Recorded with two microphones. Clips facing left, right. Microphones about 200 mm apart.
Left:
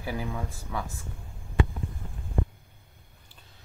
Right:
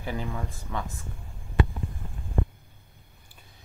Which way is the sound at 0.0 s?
10° left (ahead or behind).